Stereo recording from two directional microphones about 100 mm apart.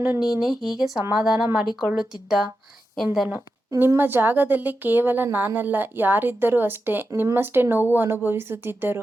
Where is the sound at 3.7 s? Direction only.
20° right (ahead or behind).